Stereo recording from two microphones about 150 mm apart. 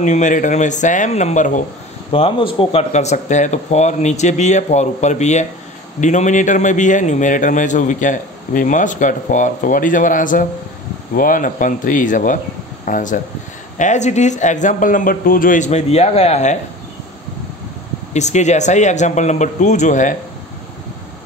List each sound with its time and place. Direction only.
0.0 s a man's voice: 55° left (ahead or behind)
2.1 s a man's voice: 40° left (ahead or behind)
18.1 s speech: 50° left (ahead or behind)